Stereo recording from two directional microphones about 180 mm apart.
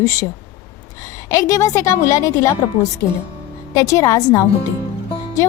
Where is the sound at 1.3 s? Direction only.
20° left (ahead or behind).